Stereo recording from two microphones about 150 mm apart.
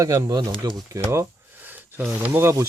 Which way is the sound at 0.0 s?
25° right (ahead or behind).